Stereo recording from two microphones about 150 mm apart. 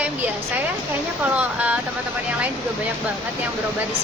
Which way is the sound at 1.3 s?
10° right (ahead or behind).